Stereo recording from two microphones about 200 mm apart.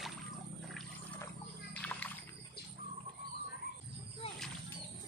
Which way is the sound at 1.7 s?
5° left (ahead or behind).